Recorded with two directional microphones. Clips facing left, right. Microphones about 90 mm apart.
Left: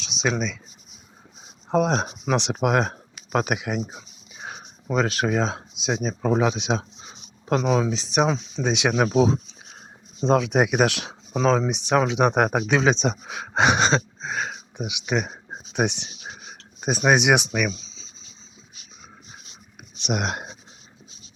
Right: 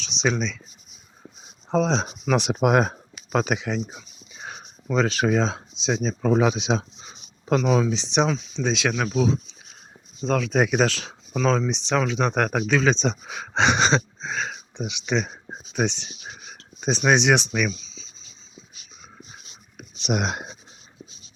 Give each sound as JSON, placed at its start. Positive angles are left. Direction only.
{"t": 0.0, "sound": "a sound", "side_deg": 5}
{"t": 1.7, "sound": "speech", "side_deg": 10}
{"t": 2.3, "sound": "speech", "side_deg": -5}
{"t": 3.3, "sound": "speech", "side_deg": 5}
{"t": 9.0, "sound": "speech", "side_deg": 30}
{"t": 17.7, "sound": "writing", "side_deg": 25}
{"t": 20.0, "sound": "speech", "side_deg": 0}